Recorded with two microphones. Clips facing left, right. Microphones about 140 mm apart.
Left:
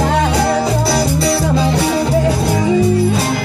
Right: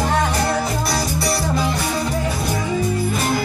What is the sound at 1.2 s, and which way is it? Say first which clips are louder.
Music: left 6 dB; 85° left.